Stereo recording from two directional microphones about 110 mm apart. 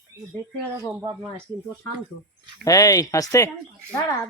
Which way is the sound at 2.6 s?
30° left (ahead or behind).